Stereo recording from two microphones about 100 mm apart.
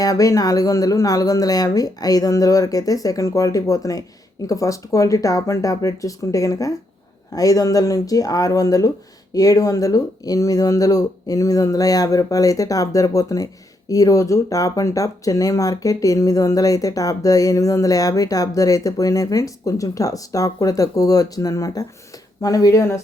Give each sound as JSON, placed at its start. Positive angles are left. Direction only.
{"t": 0.0, "sound": "speech", "side_deg": 35}